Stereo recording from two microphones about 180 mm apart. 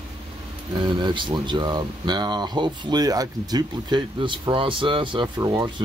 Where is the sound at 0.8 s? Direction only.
25° right (ahead or behind).